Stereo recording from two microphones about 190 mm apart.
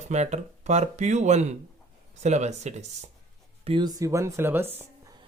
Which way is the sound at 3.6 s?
25° right (ahead or behind).